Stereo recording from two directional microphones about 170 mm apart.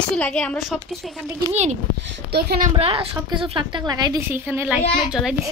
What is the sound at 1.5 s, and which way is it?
A woman's voice, 40° right (ahead or behind).